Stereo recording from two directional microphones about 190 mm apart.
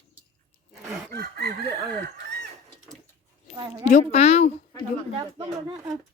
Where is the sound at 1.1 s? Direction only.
55° right (ahead or behind).